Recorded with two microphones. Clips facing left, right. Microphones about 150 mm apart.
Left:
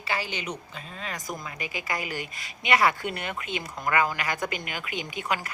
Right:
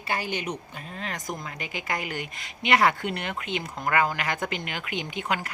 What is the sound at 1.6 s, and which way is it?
A woman's voice, 60° right (ahead or behind).